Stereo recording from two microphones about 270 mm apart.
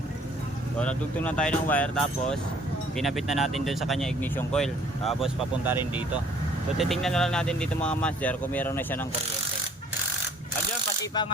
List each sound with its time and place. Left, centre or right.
0.8 s speech: centre
11.0 s ratchet: centre